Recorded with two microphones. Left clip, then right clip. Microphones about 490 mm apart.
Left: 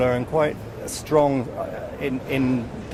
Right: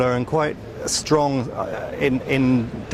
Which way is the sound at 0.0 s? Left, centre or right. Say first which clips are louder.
Even; right.